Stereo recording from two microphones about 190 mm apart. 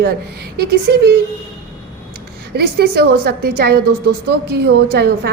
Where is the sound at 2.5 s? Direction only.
55° right (ahead or behind).